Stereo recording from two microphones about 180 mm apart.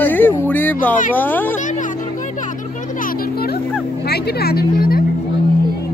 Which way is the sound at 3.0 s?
60° left (ahead or behind).